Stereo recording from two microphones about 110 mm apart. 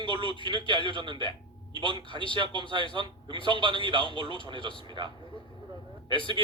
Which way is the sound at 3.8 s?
50° right (ahead or behind).